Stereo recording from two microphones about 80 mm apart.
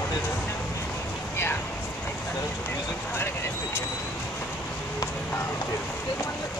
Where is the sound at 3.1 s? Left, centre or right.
Left.